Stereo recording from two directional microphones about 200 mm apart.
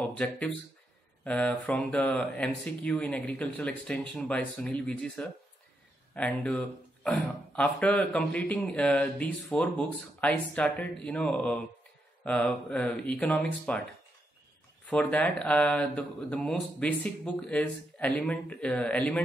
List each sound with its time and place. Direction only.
0.0 s speech: 5° left (ahead or behind)
14.9 s speech: 5° left (ahead or behind)